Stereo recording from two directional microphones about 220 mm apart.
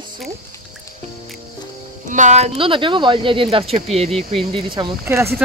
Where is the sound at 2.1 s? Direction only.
30° right (ahead or behind); by 5.3 s 15° right (ahead or behind).